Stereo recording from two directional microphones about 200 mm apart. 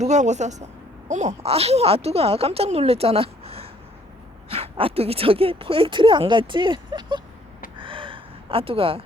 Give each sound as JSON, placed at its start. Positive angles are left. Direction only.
{"t": 0.0, "sound": "speech", "side_deg": -35}
{"t": 7.8, "sound": "gasp", "side_deg": -25}